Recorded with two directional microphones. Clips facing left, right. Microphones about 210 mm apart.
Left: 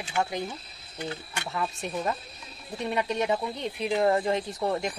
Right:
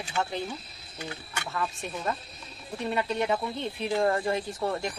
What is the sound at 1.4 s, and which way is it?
Speech, 20° left (ahead or behind).